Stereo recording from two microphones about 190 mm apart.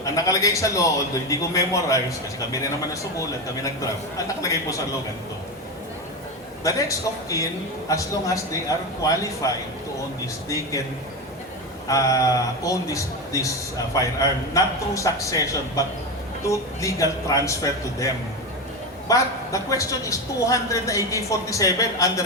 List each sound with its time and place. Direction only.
0.0 s a man's voice: 20° left (ahead or behind)
6.7 s a man's voice: 15° left (ahead or behind)
10.5 s a man's voice: 15° left (ahead or behind)
11.9 s a man's voice: 20° left (ahead or behind)